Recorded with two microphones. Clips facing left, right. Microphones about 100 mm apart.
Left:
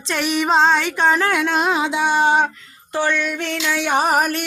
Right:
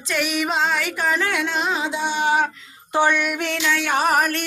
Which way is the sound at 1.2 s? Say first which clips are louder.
Left 4 dB; 50° left (ahead or behind).